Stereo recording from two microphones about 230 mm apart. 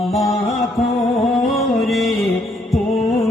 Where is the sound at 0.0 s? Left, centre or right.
Centre.